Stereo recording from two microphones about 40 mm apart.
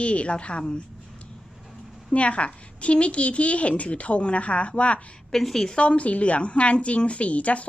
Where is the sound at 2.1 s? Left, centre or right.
Left.